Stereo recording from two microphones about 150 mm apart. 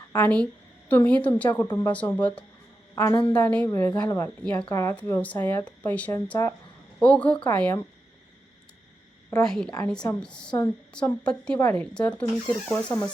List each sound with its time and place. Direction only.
0.1 s a woman's voice: 10° left (ahead or behind)
9.3 s a woman's voice: 5° left (ahead or behind)